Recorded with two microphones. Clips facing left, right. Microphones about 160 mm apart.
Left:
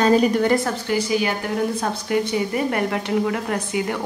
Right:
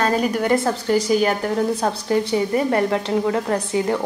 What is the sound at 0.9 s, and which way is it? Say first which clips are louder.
Speech: right 4 dB; 45° right (ahead or behind).